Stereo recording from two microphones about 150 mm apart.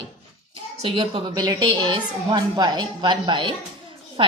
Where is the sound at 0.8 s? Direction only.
40° right (ahead or behind).